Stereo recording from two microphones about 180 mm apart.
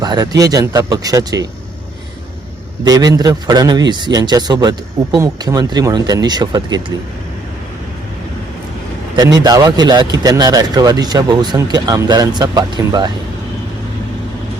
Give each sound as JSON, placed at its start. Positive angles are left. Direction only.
{"t": 0.0, "sound": "speech", "side_deg": -20}
{"t": 2.8, "sound": "speech", "side_deg": -20}
{"t": 9.1, "sound": "speech", "side_deg": -20}